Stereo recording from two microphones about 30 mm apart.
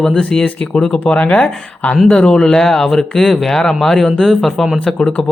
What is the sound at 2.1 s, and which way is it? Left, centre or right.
Speech, left.